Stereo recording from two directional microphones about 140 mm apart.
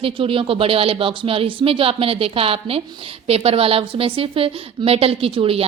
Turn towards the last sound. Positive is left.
turn(degrees=-40)  # may be behind; listen again after turning